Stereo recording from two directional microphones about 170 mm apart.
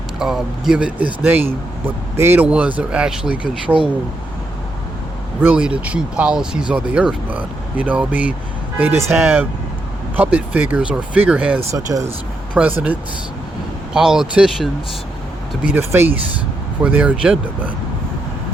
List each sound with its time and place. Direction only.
0.2 s speech: centre (ahead or behind)
5.4 s speech: 10° right (ahead or behind)